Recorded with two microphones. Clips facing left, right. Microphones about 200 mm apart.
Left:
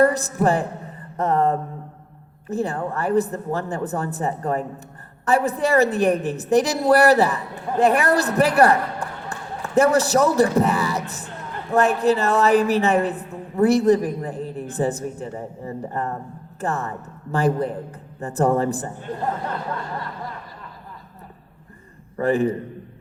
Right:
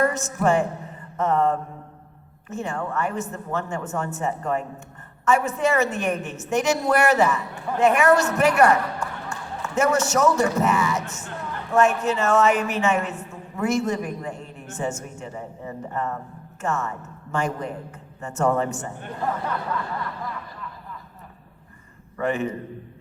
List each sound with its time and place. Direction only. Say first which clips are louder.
0.0 s a woman's voice: left 4 dB; 35° left (ahead or behind)
1.1 s a sound: left 1 dB; 35° left (ahead or behind)
2.5 s a woman's voice: left 4 dB; 35° left (ahead or behind)
22.2 s a woman's voice: left 5 dB; 35° left (ahead or behind)